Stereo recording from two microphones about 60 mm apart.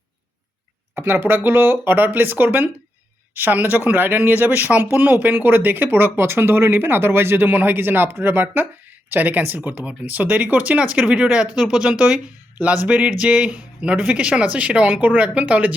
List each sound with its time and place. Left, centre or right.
0.9 s speech: right